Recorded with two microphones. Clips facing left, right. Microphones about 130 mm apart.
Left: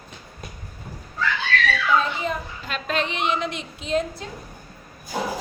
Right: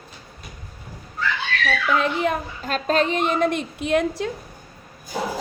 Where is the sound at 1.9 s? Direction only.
70° right (ahead or behind).